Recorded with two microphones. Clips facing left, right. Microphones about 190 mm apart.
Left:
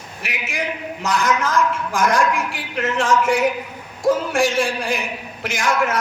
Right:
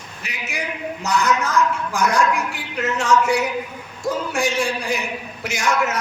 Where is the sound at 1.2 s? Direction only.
90° left.